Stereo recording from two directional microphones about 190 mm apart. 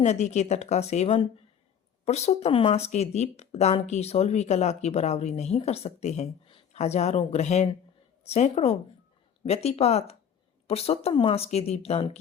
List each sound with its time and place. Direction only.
0.0 s speech: 35° left (ahead or behind)